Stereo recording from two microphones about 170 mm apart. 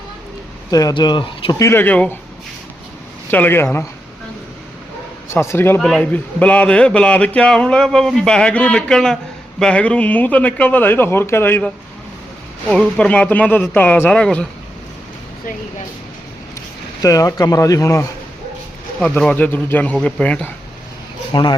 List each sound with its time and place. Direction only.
0.7 s speech: 20° left (ahead or behind)
3.3 s speech: 10° left (ahead or behind)
5.3 s speech: 15° left (ahead or behind)
17.0 s speech: 20° left (ahead or behind)
18.9 s speech: 5° left (ahead or behind)
21.3 s speech: 25° left (ahead or behind)